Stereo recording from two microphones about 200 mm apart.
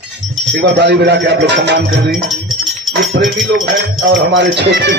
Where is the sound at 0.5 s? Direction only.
60° right (ahead or behind).